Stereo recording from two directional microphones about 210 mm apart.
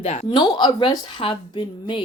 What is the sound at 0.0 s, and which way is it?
Speech, 30° left (ahead or behind).